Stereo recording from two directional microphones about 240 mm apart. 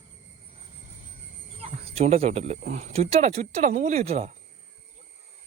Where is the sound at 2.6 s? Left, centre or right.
Right.